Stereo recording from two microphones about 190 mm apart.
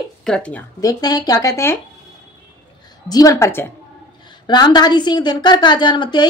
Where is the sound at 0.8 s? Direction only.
20° left (ahead or behind).